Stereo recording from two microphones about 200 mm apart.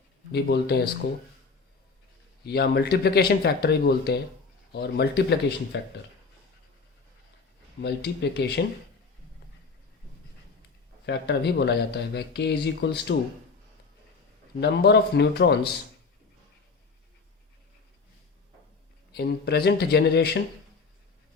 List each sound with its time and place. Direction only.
0.3 s speech: 55° left (ahead or behind)
2.4 s speech: 55° left (ahead or behind)
7.8 s speech: 55° left (ahead or behind)
11.0 s speech: 55° left (ahead or behind)
14.6 s speech: 55° left (ahead or behind)
19.1 s speech: 55° left (ahead or behind)